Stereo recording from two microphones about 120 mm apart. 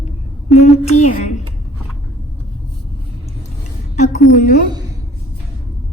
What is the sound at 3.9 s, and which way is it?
Speech, 75° left (ahead or behind).